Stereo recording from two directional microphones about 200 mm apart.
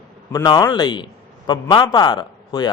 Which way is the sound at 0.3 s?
20° left (ahead or behind).